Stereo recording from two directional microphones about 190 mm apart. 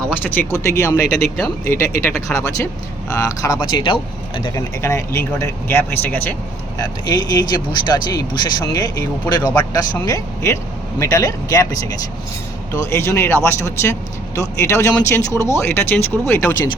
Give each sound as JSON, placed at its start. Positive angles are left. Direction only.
{"t": 0.2, "sound": "speech", "side_deg": 10}
{"t": 6.7, "sound": "speech", "side_deg": 20}
{"t": 12.7, "sound": "speech", "side_deg": 15}